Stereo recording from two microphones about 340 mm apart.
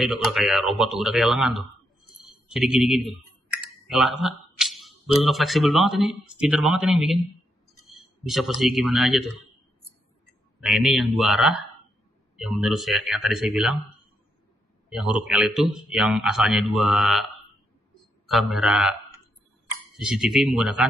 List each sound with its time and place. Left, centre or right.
0.0 s speech: centre
10.6 s speech: centre
14.9 s speech: centre
18.3 s a man's voice: centre